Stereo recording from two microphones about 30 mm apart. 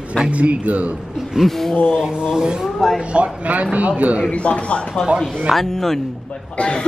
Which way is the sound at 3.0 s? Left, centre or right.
Right.